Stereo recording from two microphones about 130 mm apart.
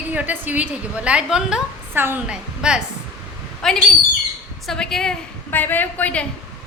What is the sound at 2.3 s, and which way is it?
A woman's voice, 5° right (ahead or behind).